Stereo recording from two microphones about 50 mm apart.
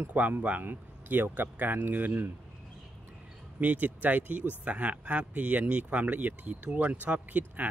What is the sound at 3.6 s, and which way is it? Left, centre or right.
Speech, right.